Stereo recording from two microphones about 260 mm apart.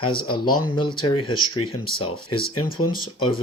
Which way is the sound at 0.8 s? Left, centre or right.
Centre.